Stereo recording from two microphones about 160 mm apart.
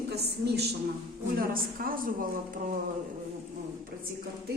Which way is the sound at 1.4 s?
65° right (ahead or behind).